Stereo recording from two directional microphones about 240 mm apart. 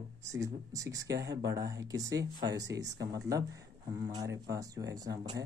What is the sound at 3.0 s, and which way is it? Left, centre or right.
Speech, centre.